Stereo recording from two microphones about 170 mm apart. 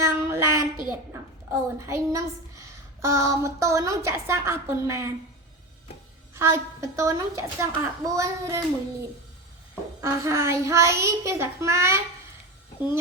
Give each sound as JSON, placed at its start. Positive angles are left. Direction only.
{"t": 0.0, "sound": "child singing", "side_deg": -15}
{"t": 1.1, "sound": "a woman's voice", "side_deg": -15}
{"t": 6.3, "sound": "a woman's voice", "side_deg": -15}
{"t": 10.0, "sound": "a woman's voice", "side_deg": -15}